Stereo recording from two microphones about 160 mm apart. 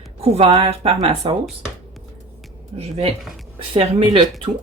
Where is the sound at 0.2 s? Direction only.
35° right (ahead or behind).